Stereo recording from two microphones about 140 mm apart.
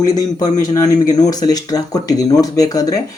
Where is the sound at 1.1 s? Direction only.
25° left (ahead or behind).